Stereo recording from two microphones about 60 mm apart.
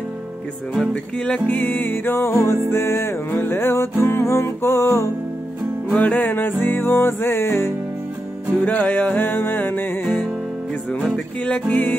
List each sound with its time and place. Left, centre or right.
0.7 s music: centre
1.5 s music: left
5.9 s music: left
8.5 s music: left
11.4 s music: centre